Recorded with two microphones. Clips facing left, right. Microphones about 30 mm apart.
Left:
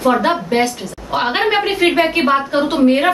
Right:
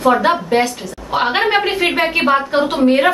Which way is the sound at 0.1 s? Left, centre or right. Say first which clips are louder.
Right 1 dB; centre.